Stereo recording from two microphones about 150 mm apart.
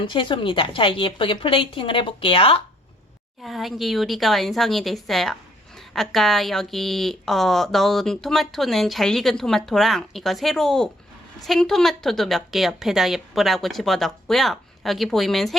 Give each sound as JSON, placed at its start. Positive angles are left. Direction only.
{"t": 0.0, "sound": "a woman's voice", "side_deg": 35}
{"t": 3.4, "sound": "a woman's voice", "side_deg": 0}